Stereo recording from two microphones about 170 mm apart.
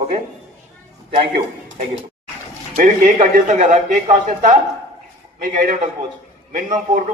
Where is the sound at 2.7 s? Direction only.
55° right (ahead or behind).